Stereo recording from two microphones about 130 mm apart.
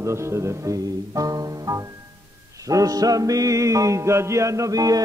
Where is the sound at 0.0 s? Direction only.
20° right (ahead or behind).